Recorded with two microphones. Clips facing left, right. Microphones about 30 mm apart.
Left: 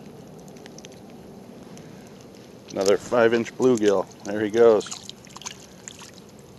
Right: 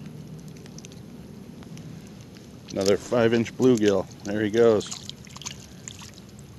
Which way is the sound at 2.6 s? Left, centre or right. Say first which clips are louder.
Left 2 dB; centre.